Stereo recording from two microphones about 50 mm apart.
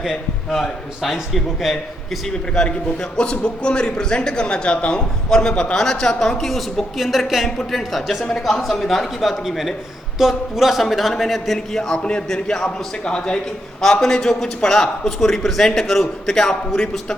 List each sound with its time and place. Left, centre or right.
0.0 s a man's voice: centre
2.6 s a man's voice: centre
11.8 s a man's voice: centre